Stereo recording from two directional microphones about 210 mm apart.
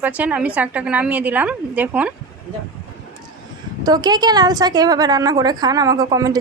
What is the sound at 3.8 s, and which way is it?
A woman's voice, 20° right (ahead or behind).